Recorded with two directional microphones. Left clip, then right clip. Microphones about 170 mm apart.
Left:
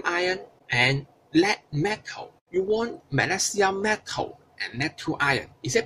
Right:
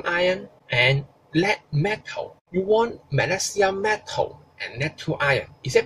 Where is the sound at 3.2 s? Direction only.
55° left (ahead or behind).